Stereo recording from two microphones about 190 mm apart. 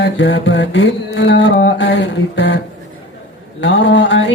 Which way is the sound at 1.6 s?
65° left (ahead or behind).